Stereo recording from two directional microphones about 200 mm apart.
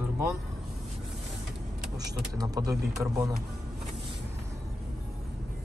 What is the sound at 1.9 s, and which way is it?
Speech, 20° right (ahead or behind).